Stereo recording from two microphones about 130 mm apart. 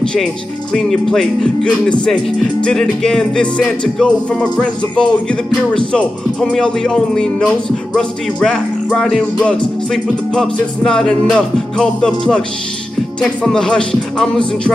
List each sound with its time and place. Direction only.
0.7 s music: centre (ahead or behind)